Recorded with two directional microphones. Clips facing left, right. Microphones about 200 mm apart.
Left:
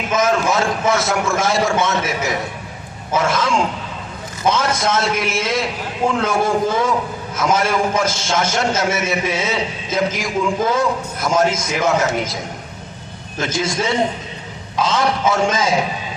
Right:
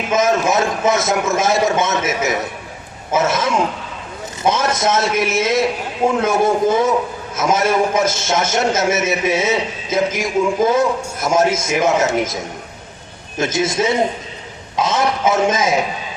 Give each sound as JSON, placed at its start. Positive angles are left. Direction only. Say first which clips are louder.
{"t": 0.1, "sound": "a man's voice", "louder": "right 2 dB", "side_deg": -20}
{"t": 13.4, "sound": "a man's voice", "louder": "right 3 dB", "side_deg": -20}